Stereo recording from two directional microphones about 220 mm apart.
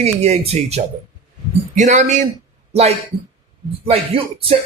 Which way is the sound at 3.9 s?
25° right (ahead or behind).